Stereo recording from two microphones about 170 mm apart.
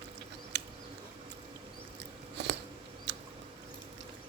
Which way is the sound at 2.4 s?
90° right.